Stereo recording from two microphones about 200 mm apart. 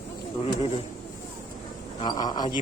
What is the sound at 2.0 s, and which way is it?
Speech, 20° left (ahead or behind).